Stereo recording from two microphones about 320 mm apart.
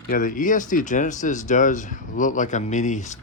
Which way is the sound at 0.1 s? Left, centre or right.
Left.